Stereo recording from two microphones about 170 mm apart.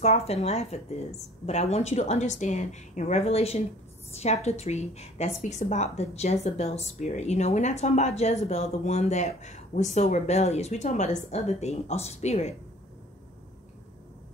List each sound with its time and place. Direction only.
0.0 s a woman's voice: 40° left (ahead or behind)